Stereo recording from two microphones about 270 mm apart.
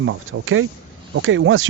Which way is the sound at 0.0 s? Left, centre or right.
Right.